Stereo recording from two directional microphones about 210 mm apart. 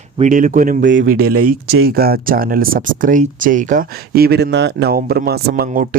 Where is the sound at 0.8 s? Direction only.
60° right (ahead or behind).